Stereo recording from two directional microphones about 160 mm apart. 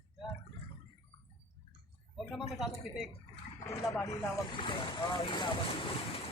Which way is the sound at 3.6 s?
20° left (ahead or behind).